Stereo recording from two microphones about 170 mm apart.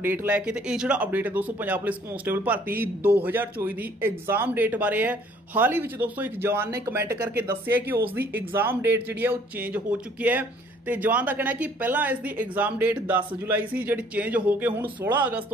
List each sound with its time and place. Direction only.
0.0 s speech: 10° right (ahead or behind)